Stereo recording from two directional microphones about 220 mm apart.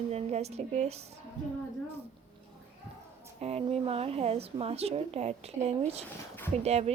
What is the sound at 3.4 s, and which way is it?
A woman's voice, 30° right (ahead or behind).